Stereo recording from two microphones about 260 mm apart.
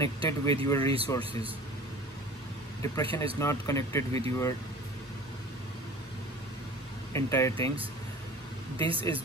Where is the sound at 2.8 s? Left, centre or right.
Centre.